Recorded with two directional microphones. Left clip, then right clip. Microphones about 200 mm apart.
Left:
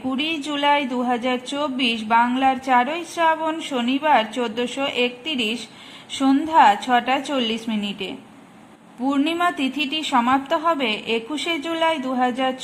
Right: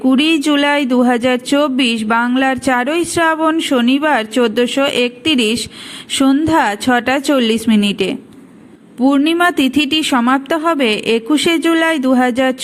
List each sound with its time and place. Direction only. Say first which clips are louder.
0.1 s speech: right 11 dB; 25° right (ahead or behind)